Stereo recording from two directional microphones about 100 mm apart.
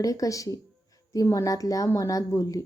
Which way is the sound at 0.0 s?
35° left (ahead or behind).